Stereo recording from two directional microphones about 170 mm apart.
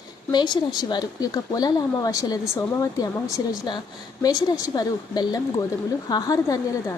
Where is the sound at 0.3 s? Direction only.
25° left (ahead or behind).